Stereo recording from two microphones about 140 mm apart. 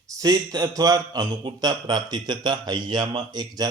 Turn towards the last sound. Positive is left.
turn(degrees=-30)  # may be behind; listen again after turning